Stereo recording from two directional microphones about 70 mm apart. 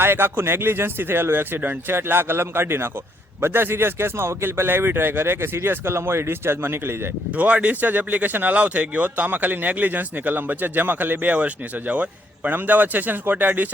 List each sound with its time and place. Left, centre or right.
0.0 s speech: right
7.3 s speech: centre